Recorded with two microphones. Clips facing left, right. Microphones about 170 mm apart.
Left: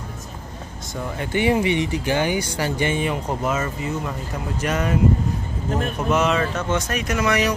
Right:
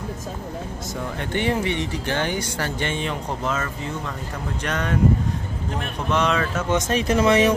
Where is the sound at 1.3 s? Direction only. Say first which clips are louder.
Left 4 dB; 10° left (ahead or behind).